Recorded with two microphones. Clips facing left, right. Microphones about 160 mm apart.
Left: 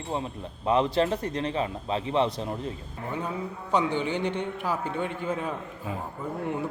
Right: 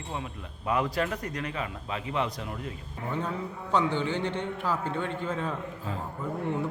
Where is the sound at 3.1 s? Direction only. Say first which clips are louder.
Even; 15° left (ahead or behind).